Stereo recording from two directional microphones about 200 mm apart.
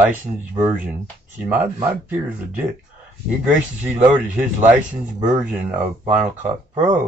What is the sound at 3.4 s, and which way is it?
Speech, 5° right (ahead or behind).